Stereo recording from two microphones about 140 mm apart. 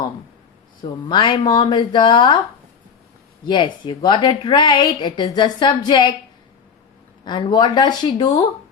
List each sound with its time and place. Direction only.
1.0 s a woman's voice: 35° left (ahead or behind)
3.4 s a woman's voice: 35° left (ahead or behind)
7.3 s a woman's voice: 30° left (ahead or behind)